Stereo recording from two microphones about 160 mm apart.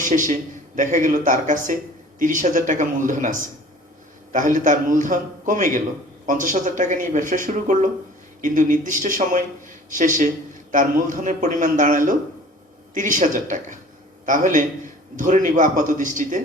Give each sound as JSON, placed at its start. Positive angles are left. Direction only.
{"t": 0.0, "sound": "a man's voice", "side_deg": -55}